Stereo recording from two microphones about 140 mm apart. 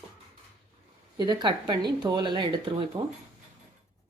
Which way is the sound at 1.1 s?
30° right (ahead or behind).